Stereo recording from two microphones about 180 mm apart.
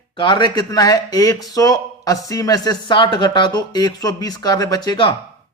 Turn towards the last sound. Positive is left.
turn(degrees=25)  # may be behind; listen again after turning